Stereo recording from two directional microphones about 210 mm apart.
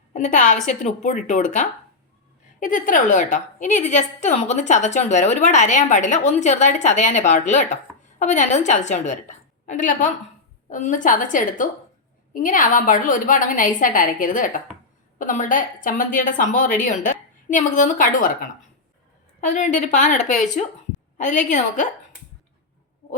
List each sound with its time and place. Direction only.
0.1 s a woman's voice: 35° left (ahead or behind)